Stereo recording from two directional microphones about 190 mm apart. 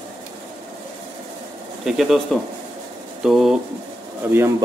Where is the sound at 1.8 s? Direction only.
Centre (ahead or behind).